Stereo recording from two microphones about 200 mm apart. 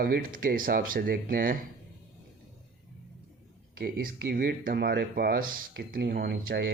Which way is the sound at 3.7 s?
50° right (ahead or behind).